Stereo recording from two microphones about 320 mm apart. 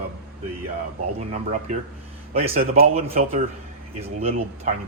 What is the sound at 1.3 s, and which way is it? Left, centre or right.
Speech, right.